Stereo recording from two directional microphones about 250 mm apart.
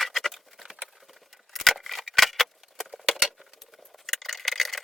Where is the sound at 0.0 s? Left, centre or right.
Centre.